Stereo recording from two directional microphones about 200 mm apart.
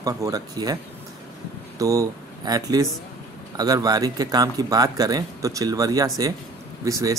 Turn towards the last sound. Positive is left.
turn(degrees=-15)  # may be behind; listen again after turning